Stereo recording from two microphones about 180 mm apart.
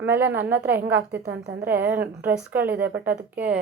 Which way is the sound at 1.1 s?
65° right (ahead or behind).